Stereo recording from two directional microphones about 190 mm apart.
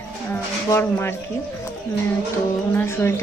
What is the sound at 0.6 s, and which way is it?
Speech, 15° left (ahead or behind).